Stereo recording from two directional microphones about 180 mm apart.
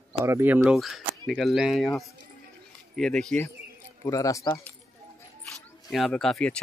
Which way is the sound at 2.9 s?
5° left (ahead or behind).